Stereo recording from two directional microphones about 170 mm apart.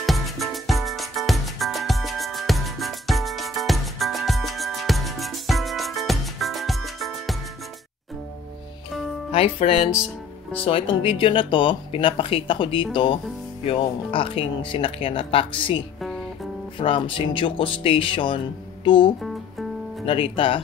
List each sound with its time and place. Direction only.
0.0 s music: centre (ahead or behind)
9.3 s speech: 35° left (ahead or behind)